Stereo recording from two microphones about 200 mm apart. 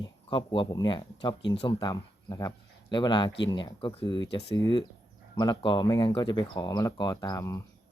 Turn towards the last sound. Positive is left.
turn(degrees=15)  # may be behind; listen again after turning